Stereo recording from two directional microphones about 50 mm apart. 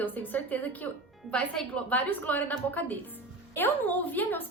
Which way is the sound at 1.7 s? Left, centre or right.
Left.